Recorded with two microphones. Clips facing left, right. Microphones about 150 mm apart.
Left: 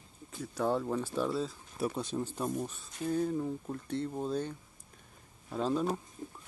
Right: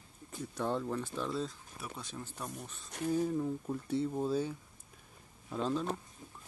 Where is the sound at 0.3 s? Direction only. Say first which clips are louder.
Left 4 dB; centre (ahead or behind).